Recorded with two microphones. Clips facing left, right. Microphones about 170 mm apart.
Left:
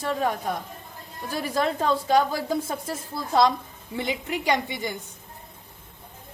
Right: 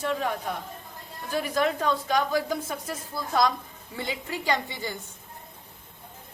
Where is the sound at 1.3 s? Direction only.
30° left (ahead or behind).